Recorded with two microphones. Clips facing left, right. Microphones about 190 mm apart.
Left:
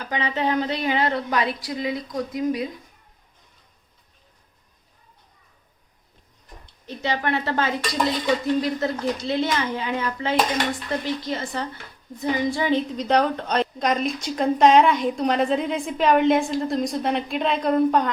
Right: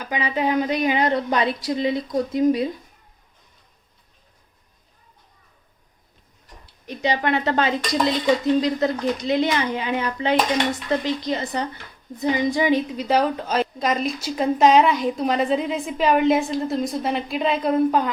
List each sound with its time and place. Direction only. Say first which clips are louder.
0.0 s a woman's voice: right 1 dB; 10° right (ahead or behind); by 2.6 s 25° right (ahead or behind)
6.7 s a woman's voice: right 3 dB; 15° right (ahead or behind)